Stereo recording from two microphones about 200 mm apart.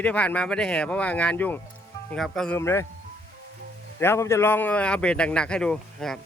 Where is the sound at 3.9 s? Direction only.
10° left (ahead or behind).